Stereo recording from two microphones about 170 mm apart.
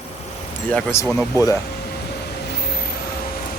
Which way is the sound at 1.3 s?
20° left (ahead or behind).